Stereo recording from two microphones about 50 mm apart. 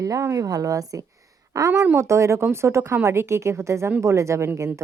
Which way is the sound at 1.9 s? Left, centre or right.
Right.